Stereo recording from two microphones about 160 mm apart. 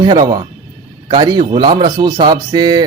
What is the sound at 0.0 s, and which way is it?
Speech, 25° right (ahead or behind).